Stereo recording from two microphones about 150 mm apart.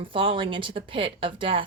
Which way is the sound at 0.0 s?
35° right (ahead or behind).